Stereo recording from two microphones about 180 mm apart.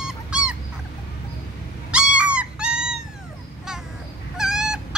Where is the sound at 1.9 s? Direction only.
5° right (ahead or behind).